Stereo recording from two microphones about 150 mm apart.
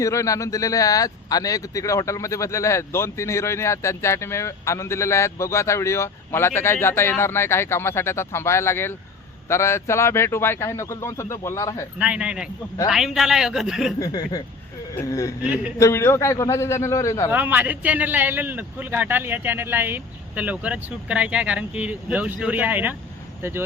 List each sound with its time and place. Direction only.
0.0 s speech: 20° left (ahead or behind)
11.9 s a man's voice: 10° right (ahead or behind)
14.0 s speech: 25° left (ahead or behind)
17.3 s a man's voice: 10° right (ahead or behind)